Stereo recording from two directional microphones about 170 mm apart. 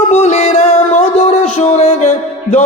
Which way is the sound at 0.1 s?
40° left (ahead or behind).